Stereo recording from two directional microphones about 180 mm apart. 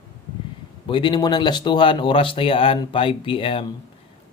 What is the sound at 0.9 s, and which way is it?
Speech, 25° left (ahead or behind).